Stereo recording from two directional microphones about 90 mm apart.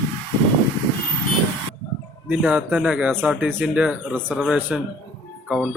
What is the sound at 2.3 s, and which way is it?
Speech, 15° right (ahead or behind).